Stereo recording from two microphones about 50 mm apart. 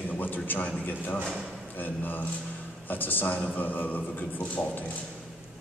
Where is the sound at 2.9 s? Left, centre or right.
Left.